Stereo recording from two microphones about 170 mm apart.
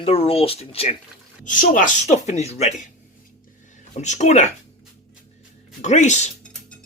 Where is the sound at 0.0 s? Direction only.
35° left (ahead or behind).